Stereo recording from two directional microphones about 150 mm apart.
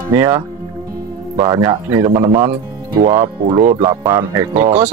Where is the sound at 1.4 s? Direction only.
25° right (ahead or behind).